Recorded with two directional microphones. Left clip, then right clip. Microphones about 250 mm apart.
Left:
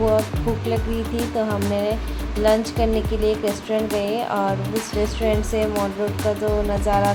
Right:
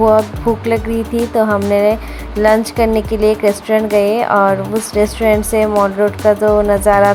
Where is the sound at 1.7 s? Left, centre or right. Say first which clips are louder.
Right 11 dB; right.